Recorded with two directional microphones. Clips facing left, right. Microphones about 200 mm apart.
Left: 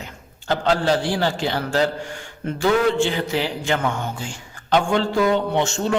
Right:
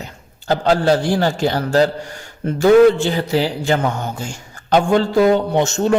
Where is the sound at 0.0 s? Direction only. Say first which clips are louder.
Right 3 dB; 40° right (ahead or behind).